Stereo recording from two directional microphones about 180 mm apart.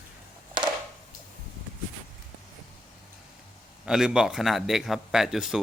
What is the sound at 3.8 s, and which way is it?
Speech, 5° right (ahead or behind).